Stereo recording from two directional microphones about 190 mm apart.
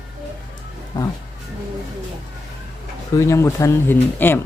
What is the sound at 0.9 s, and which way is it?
Speech, 20° left (ahead or behind).